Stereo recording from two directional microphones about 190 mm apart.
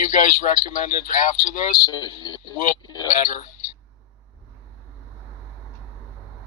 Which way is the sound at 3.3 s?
45° left (ahead or behind).